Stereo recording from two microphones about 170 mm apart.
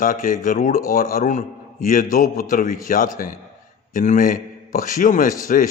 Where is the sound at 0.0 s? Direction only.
50° left (ahead or behind).